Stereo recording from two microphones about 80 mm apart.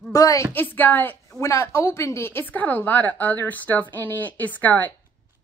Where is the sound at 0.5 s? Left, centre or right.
Left.